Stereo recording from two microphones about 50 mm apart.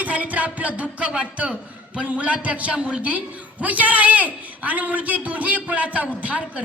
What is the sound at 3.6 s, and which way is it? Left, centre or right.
A woman's voice, right.